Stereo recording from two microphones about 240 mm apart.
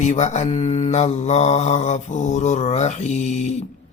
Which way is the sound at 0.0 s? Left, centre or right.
Left.